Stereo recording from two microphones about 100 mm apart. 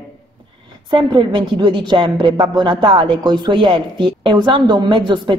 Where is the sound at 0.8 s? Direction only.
50° right (ahead or behind).